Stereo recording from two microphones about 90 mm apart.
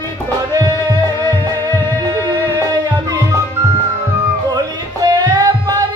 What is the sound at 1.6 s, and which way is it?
Music, 25° left (ahead or behind).